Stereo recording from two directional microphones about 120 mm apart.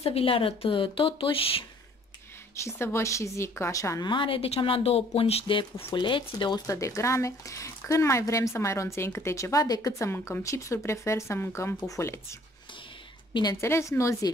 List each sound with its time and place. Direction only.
0.0 s speech: 55° left (ahead or behind)
2.5 s a woman's voice: 25° left (ahead or behind)
4.1 s speech: 45° left (ahead or behind)
6.6 s a woman's voice: 30° left (ahead or behind)
13.3 s a woman's voice: 35° left (ahead or behind)
13.6 s a woman's voice: 25° left (ahead or behind)